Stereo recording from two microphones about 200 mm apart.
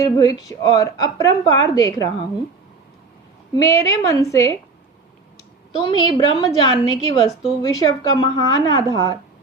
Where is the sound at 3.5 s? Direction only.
15° left (ahead or behind).